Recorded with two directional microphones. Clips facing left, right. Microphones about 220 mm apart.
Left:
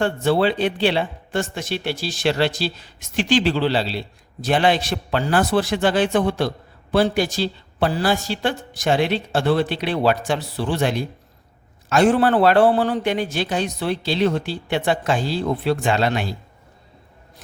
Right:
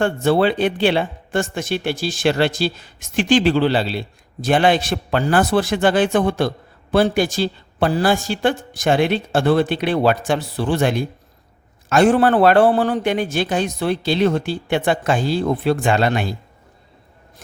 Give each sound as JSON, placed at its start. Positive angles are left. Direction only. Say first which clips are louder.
{"t": 0.0, "sound": "speech", "louder": "right 2 dB", "side_deg": -50}